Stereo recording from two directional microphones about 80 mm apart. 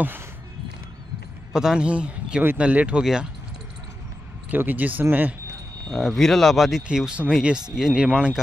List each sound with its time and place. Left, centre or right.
1.5 s speech: centre
3.0 s speech: centre
4.5 s speech: right
5.9 s speech: centre